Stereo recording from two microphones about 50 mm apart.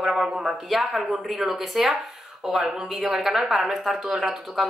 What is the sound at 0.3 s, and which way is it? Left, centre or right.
Speech, centre.